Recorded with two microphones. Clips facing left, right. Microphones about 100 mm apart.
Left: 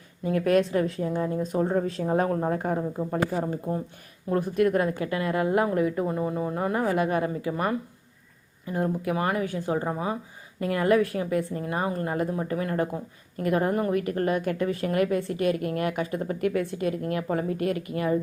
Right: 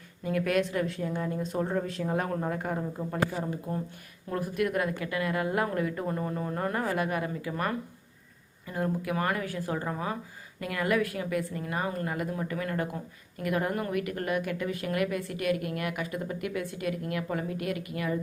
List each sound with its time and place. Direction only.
0.3 s a woman's voice: 30° left (ahead or behind)
1.4 s speech: 15° left (ahead or behind)
1.7 s a woman's voice: 35° left (ahead or behind)
8.7 s speech: 20° left (ahead or behind)
10.6 s a woman's voice: 30° left (ahead or behind)